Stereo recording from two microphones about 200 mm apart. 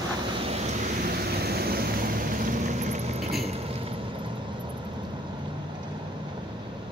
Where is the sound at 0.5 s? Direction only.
40° right (ahead or behind).